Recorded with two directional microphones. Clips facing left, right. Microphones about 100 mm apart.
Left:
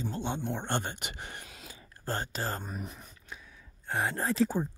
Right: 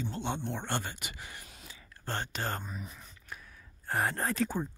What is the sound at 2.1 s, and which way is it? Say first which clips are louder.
Speech: left 1 dB; 35° left (ahead or behind).